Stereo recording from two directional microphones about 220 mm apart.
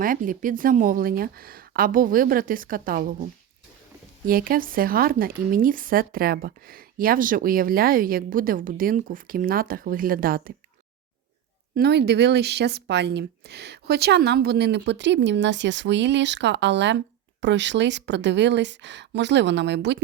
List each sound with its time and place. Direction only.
0.0 s speech: 40° right (ahead or behind)
4.3 s speech: 40° right (ahead or behind)
11.7 s speech: 45° right (ahead or behind)